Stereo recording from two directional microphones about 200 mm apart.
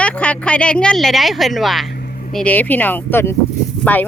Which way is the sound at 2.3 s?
5° left (ahead or behind).